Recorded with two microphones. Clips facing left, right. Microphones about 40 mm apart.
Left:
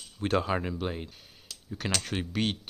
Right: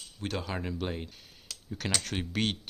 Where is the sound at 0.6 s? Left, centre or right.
Centre.